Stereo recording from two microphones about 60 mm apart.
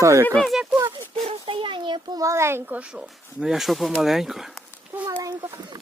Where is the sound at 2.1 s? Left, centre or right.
Right.